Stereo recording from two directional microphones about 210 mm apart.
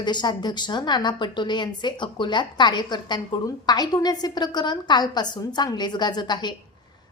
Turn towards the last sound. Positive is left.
turn(degrees=20)  # may be behind; listen again after turning